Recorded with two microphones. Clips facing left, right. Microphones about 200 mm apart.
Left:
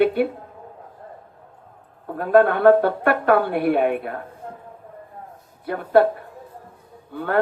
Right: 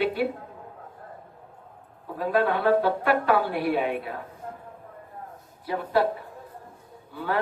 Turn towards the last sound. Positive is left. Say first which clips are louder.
# left 5 dB
turn(degrees=60)  # may be behind; listen again after turning